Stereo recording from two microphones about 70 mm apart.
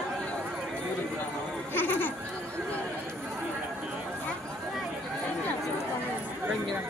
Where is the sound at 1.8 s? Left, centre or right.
Left.